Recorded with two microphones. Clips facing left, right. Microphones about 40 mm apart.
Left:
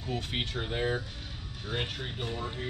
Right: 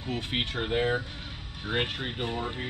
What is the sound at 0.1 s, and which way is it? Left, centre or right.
Speech, right.